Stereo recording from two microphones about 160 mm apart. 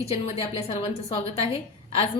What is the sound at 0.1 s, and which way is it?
A woman's voice, 40° left (ahead or behind).